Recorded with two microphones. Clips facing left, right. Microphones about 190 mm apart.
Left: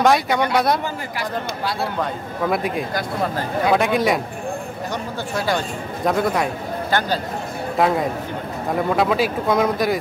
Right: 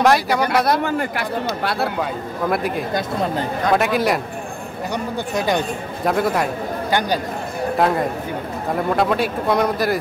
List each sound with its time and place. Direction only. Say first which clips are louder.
0.0 s speech: right 1 dB; centre (ahead or behind)
0.8 s a man's voice: right 5 dB; 60° right (ahead or behind)
2.5 s speech: right 2 dB; centre (ahead or behind)
4.9 s speech: right 3 dB; 20° right (ahead or behind)
6.0 s speech: right 1 dB; centre (ahead or behind)
6.9 s speech: right 1 dB; 15° right (ahead or behind)
7.7 s a man's voice: even; centre (ahead or behind)